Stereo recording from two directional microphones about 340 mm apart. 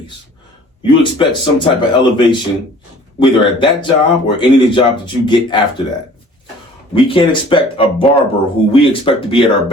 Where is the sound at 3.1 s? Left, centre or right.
Centre.